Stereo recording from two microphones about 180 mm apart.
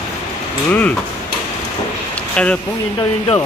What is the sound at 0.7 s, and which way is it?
Speech, 10° left (ahead or behind).